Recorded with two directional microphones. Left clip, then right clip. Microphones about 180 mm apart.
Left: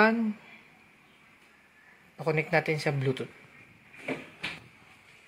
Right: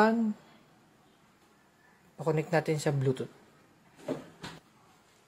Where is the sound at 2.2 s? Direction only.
20° right (ahead or behind).